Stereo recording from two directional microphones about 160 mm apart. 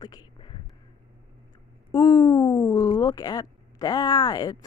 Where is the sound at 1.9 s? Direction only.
25° left (ahead or behind).